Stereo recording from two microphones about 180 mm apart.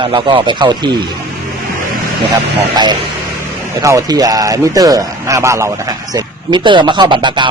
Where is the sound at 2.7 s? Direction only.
25° right (ahead or behind).